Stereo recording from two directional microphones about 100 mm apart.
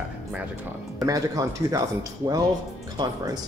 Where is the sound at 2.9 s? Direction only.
40° right (ahead or behind).